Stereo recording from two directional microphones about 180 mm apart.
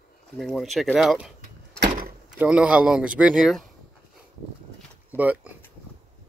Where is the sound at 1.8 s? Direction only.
55° right (ahead or behind).